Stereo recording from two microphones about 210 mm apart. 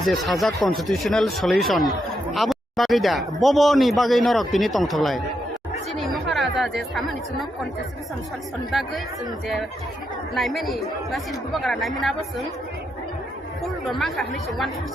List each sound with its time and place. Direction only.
0.0 s speech: centre (ahead or behind)
8.7 s speech: centre (ahead or behind)
10.3 s speech: centre (ahead or behind)
13.6 s speech: centre (ahead or behind)